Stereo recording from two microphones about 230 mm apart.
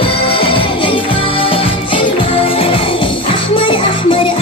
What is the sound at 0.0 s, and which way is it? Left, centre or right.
Music, left.